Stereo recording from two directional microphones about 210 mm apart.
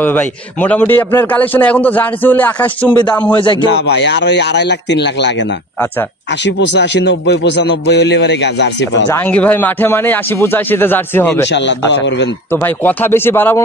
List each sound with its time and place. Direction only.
0.0 s a man's voice: 10° left (ahead or behind)
3.3 s speech: 25° left (ahead or behind)
3.7 s a man's voice: 55° left (ahead or behind)
9.1 s a man's voice: 10° left (ahead or behind)
11.4 s a man's voice: 55° left (ahead or behind)
12.4 s a man's voice: 10° left (ahead or behind)